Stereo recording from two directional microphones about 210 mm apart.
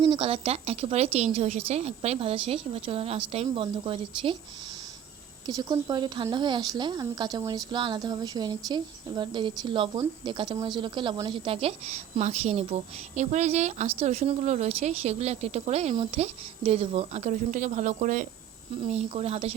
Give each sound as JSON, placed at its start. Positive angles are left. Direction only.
{"t": 0.0, "sound": "speech", "side_deg": -25}
{"t": 5.5, "sound": "speech", "side_deg": -15}